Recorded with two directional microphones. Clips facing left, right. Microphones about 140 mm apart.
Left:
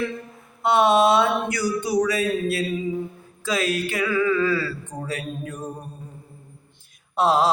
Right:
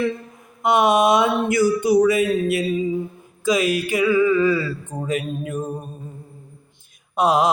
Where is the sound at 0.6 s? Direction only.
15° right (ahead or behind).